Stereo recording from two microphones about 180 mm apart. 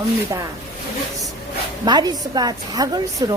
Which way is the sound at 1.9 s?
25° right (ahead or behind).